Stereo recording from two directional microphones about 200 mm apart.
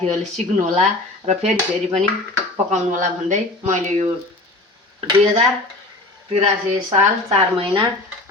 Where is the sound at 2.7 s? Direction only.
40° right (ahead or behind).